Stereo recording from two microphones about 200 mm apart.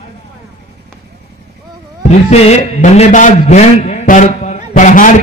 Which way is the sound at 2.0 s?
35° left (ahead or behind).